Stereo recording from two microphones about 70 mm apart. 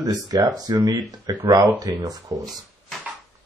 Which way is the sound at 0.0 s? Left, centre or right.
Right.